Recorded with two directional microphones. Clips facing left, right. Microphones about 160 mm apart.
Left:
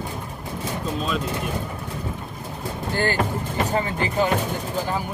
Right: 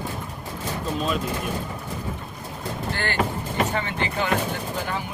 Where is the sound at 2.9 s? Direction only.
40° left (ahead or behind).